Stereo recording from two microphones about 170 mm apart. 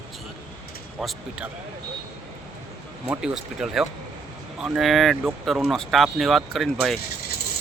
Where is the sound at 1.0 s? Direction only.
5° right (ahead or behind).